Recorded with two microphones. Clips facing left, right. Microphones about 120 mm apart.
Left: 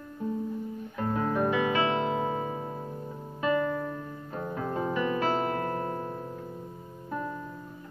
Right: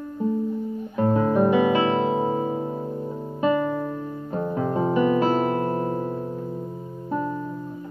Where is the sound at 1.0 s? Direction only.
20° right (ahead or behind).